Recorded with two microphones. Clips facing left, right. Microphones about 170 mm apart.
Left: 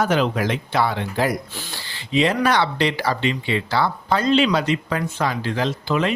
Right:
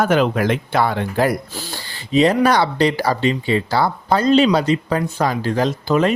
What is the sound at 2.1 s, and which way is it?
Speech, 40° right (ahead or behind).